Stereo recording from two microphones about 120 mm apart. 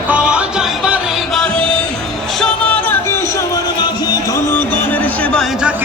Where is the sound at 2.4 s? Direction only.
10° left (ahead or behind).